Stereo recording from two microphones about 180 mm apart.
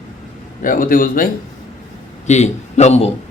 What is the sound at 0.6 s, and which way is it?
Speech, 50° left (ahead or behind).